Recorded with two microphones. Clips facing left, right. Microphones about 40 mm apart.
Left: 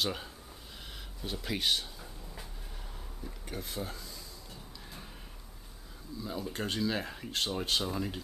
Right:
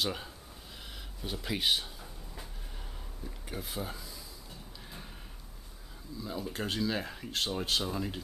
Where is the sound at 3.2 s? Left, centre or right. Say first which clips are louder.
Even; centre.